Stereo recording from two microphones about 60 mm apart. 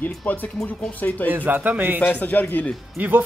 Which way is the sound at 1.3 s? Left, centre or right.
Right.